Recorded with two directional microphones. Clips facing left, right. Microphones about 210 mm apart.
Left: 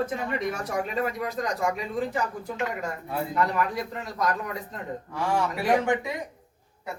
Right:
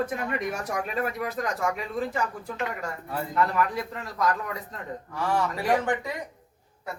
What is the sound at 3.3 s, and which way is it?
Speech, centre (ahead or behind).